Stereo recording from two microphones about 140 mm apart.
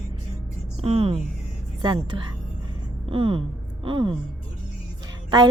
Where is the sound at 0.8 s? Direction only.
45° right (ahead or behind).